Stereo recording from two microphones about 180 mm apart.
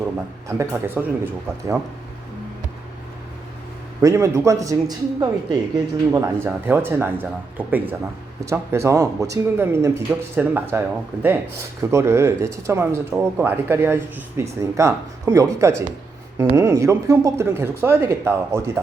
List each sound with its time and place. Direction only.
0.0 s a man's voice: 15° right (ahead or behind)
4.0 s a man's voice: 15° right (ahead or behind)
8.4 s a man's voice: 15° right (ahead or behind)